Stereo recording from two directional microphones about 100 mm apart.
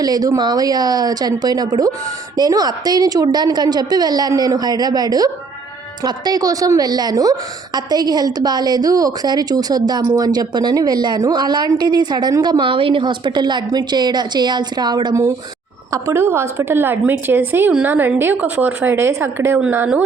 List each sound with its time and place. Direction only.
0.0 s a woman's voice: 40° right (ahead or behind)
15.9 s a woman's voice: 30° right (ahead or behind)